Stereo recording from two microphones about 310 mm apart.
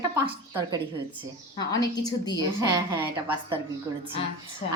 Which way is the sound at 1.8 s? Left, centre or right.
Centre.